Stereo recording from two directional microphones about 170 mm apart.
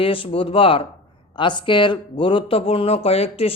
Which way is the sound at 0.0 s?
30° left (ahead or behind).